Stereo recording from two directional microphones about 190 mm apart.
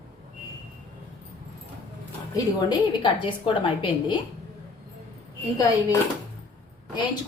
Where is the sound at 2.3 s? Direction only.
25° left (ahead or behind).